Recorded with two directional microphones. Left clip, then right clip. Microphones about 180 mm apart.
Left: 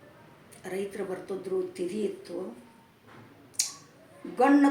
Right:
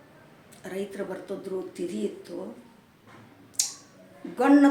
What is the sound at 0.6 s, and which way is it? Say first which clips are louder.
Speech: even; 15° right (ahead or behind).